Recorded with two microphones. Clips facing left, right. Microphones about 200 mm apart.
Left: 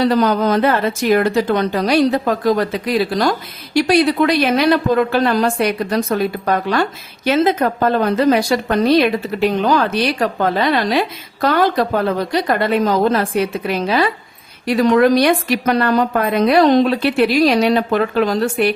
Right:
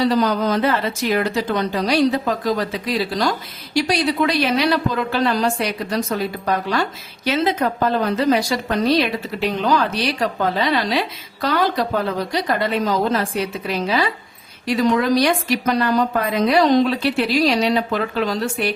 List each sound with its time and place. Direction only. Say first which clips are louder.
0.0 s a woman's voice: left 3 dB; 60° left (ahead or behind)